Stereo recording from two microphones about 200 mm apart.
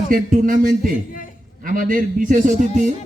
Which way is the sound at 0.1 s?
45° right (ahead or behind).